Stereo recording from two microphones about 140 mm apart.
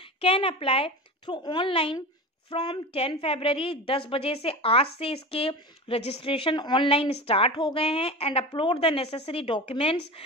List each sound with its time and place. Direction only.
0.0 s a woman's voice: 40° left (ahead or behind)